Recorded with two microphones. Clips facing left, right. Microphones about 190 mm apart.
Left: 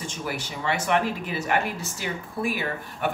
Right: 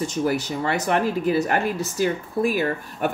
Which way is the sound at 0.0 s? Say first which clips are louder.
Right 9 dB; 40° right (ahead or behind).